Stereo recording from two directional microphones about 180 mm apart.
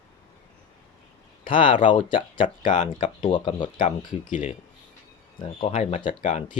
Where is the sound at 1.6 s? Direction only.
45° left (ahead or behind).